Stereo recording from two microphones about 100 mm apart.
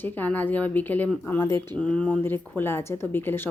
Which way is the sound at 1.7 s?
10° left (ahead or behind).